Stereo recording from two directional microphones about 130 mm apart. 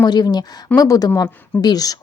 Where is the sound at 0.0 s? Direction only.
35° left (ahead or behind).